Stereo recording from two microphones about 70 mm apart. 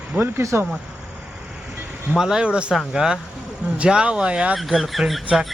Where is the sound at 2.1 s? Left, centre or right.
Centre.